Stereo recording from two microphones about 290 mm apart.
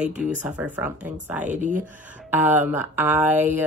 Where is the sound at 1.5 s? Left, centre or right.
Right.